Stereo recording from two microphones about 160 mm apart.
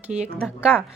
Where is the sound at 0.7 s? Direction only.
10° left (ahead or behind).